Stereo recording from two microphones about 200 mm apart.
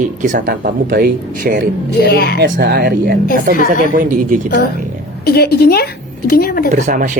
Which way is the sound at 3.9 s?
45° right (ahead or behind).